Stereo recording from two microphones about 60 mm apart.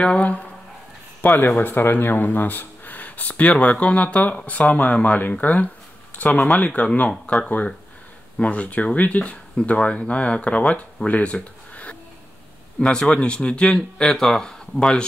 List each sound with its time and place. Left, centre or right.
0.0 s speech: left
1.2 s speech: left
11.7 s music: left
12.8 s speech: centre
14.0 s speech: centre